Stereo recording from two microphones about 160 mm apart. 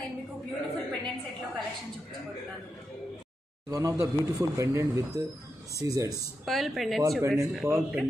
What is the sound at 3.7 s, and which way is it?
Speech, 20° right (ahead or behind).